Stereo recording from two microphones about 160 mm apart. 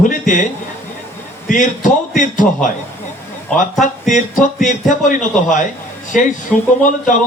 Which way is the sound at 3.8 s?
50° left (ahead or behind).